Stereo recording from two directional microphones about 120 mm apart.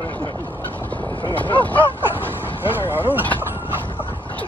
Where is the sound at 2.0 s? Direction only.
15° right (ahead or behind).